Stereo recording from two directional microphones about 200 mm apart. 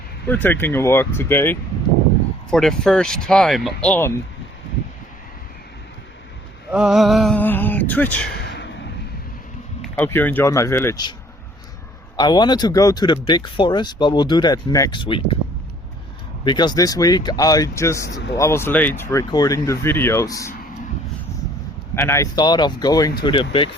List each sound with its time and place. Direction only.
0.3 s speech: 10° left (ahead or behind)
6.7 s speech: 5° right (ahead or behind)
8.4 s a sound: 60° left (ahead or behind)
9.8 s speech: 10° left (ahead or behind)
12.1 s speech: 20° left (ahead or behind)
16.4 s speech: 20° left (ahead or behind)
18.1 s a man's voice: 60° left (ahead or behind)
18.3 s speech: 15° left (ahead or behind)
21.9 s speech: 15° left (ahead or behind)